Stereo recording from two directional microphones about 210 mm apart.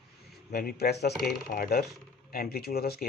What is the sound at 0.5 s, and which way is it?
Speech, 45° left (ahead or behind).